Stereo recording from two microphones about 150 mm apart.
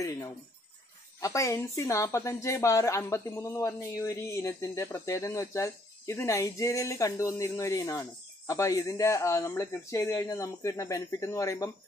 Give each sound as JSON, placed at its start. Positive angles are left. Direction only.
{"t": 0.0, "sound": "speech", "side_deg": 20}